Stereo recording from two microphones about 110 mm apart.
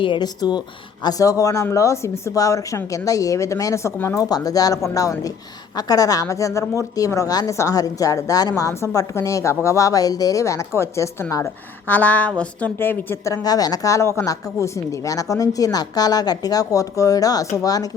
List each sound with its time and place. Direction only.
0.0 s a woman's voice: 45° left (ahead or behind)
1.0 s a woman's voice: 30° left (ahead or behind)
11.9 s a woman's voice: 15° left (ahead or behind)
13.3 s a woman's voice: 35° left (ahead or behind)